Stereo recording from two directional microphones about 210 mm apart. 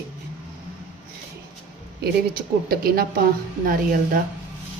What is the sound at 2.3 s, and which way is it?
A woman's voice, 45° right (ahead or behind).